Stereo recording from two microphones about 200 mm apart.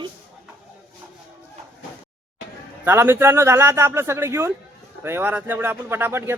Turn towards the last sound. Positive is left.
turn(degrees=-10)  # may be behind; listen again after turning